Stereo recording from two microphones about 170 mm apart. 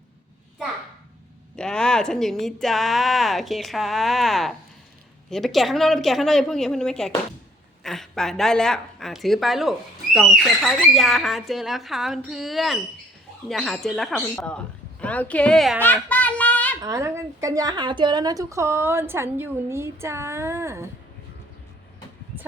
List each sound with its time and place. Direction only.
1.5 s a woman's voice: 5° left (ahead or behind)
15.8 s a sound: 10° left (ahead or behind)
16.8 s a woman's voice: 15° right (ahead or behind)